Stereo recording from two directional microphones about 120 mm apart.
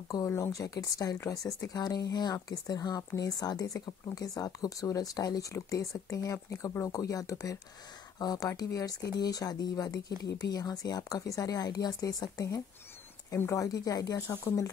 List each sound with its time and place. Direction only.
0.1 s speech: 25° left (ahead or behind)